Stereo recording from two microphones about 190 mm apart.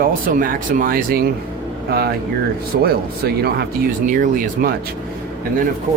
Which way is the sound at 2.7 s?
55° right (ahead or behind).